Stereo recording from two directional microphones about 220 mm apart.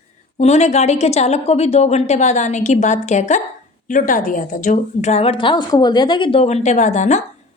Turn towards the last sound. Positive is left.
turn(degrees=30)  # may be behind; listen again after turning